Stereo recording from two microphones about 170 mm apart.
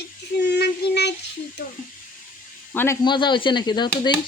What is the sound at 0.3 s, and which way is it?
Child singing, 80° left.